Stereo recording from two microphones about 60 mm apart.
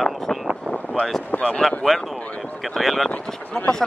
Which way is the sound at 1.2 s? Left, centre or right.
Left.